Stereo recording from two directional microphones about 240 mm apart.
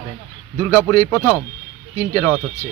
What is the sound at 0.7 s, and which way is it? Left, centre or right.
Speech, centre.